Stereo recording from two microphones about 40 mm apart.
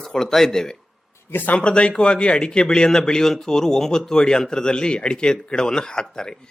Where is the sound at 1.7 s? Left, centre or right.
Left.